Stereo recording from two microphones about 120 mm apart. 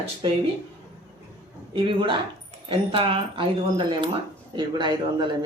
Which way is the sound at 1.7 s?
45° right (ahead or behind).